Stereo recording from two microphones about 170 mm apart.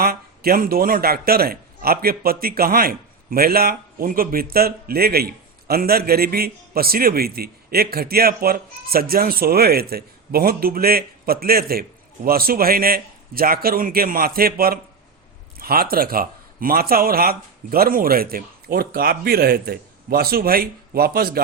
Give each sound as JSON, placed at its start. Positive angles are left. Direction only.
{"t": 0.0, "sound": "speech", "side_deg": -60}